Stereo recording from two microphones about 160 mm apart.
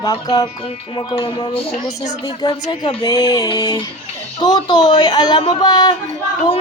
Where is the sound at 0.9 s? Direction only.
30° left (ahead or behind).